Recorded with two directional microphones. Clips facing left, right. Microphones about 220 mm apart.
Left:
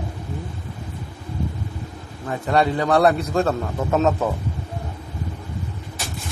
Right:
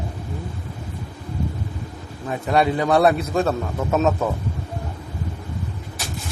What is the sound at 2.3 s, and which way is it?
A man's voice, 20° right (ahead or behind).